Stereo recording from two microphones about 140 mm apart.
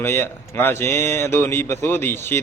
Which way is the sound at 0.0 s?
15° left (ahead or behind).